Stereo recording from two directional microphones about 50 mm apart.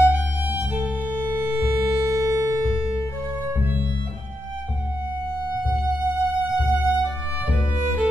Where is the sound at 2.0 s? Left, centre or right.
Right.